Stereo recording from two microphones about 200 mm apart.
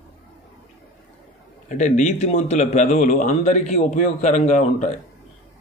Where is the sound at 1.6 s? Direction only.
35° left (ahead or behind).